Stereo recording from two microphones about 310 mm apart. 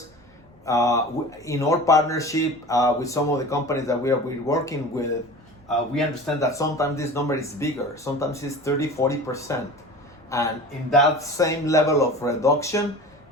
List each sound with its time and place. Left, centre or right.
0.6 s speech: centre
6.4 s speech: centre